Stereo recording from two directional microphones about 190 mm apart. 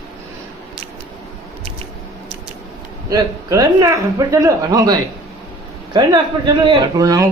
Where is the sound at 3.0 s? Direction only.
20° right (ahead or behind).